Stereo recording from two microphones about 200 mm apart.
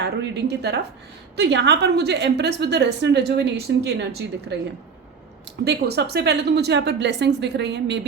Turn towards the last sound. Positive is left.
turn(degrees=-60)  # may be behind; listen again after turning